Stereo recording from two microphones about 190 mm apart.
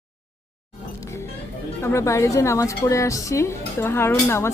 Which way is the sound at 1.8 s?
15° left (ahead or behind).